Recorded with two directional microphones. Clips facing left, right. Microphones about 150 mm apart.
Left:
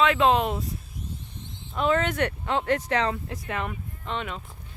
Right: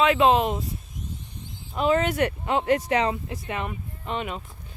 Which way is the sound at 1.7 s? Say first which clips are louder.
Right 2 dB; 5° right (ahead or behind).